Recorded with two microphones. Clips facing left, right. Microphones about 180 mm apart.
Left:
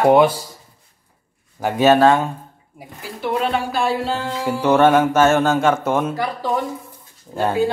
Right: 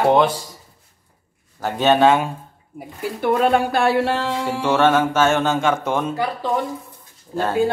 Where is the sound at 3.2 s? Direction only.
50° right (ahead or behind); by 4.3 s 70° right (ahead or behind).